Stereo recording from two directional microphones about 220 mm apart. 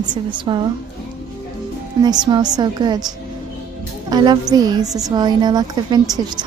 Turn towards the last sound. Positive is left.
turn(degrees=-15)  # may be behind; listen again after turning